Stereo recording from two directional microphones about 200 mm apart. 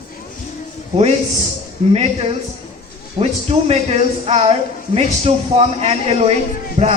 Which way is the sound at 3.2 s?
30° right (ahead or behind).